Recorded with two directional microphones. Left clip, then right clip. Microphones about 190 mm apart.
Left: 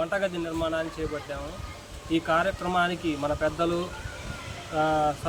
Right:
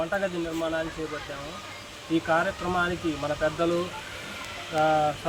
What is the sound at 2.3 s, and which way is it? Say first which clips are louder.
Speech: left 1 dB; 20° left (ahead or behind).